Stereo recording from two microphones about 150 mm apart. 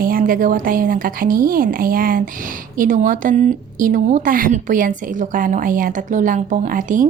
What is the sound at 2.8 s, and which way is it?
A woman's voice, 60° right (ahead or behind).